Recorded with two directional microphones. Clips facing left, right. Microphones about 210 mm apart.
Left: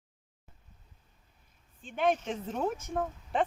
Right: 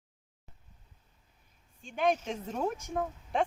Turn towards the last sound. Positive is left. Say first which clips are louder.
# even
turn(degrees=0)  # may be behind; listen again after turning